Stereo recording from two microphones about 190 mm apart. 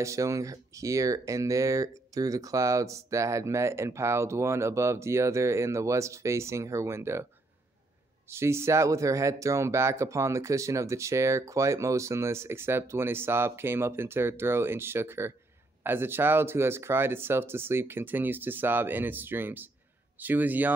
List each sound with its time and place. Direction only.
0.0 s speech: 15° right (ahead or behind)
8.3 s speech: 15° right (ahead or behind)